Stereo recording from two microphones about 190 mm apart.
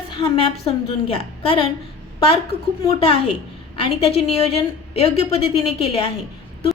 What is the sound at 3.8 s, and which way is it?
A woman's voice, 30° left (ahead or behind).